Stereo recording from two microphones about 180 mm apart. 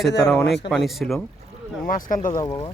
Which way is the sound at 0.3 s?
5° left (ahead or behind).